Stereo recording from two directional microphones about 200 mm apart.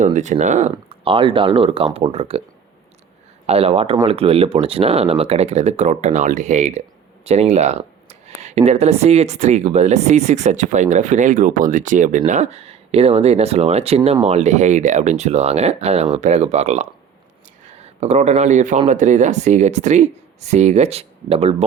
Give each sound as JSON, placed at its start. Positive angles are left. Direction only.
{"t": 0.0, "sound": "speech", "side_deg": -35}
{"t": 3.4, "sound": "speech", "side_deg": -30}